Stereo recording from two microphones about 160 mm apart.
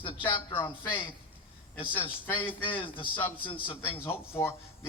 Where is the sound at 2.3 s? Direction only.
30° left (ahead or behind).